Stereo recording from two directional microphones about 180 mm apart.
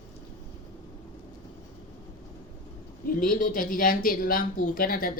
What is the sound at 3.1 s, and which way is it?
Speech, 50° left (ahead or behind).